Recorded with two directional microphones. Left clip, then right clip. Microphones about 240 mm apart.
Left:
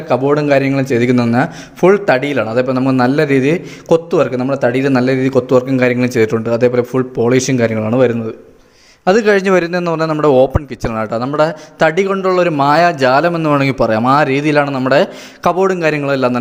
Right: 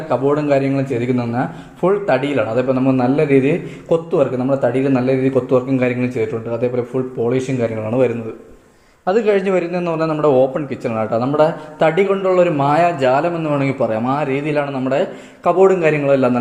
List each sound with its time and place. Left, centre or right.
0.1 s a man's voice: left